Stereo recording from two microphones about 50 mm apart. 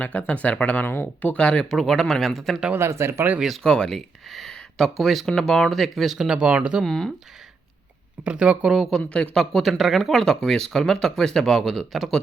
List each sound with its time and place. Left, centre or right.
0.0 s speech: left
0.9 s speech: left
1.3 s speech: left
1.7 s speech: centre
2.7 s speech: right
3.6 s speech: centre
6.1 s speech: centre
6.4 s speech: right
6.8 s speech: centre
8.2 s speech: right
9.0 s speech: left
9.3 s speech: centre